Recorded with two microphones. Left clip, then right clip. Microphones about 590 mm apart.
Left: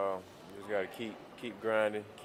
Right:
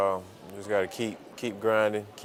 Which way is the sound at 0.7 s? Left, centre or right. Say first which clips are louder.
Right 8 dB; right.